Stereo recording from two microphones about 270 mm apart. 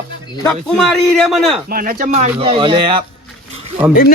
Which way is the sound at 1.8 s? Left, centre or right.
Right.